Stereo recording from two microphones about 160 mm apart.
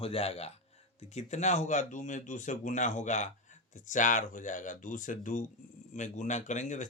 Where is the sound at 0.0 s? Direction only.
40° left (ahead or behind).